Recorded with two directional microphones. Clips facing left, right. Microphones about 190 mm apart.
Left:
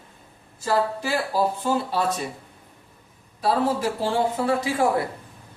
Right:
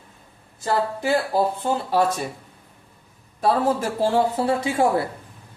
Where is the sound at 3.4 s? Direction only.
50° right (ahead or behind).